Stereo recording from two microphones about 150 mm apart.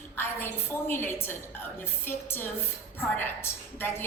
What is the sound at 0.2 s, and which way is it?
A woman's voice, 15° left (ahead or behind).